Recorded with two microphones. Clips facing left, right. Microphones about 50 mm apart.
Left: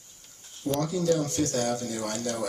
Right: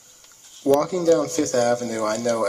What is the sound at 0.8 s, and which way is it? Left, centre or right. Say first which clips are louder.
Speech: right 7 dB; right.